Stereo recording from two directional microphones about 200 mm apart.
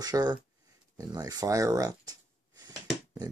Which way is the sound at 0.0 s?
20° right (ahead or behind).